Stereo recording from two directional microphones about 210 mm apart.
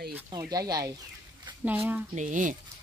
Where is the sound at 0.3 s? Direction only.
15° right (ahead or behind).